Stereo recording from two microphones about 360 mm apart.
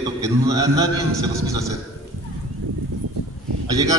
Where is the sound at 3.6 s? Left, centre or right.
Centre.